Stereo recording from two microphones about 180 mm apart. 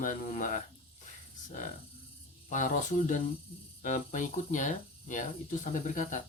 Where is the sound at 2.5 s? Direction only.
45° left (ahead or behind).